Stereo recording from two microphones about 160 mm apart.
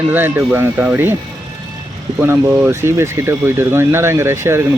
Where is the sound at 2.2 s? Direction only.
15° right (ahead or behind).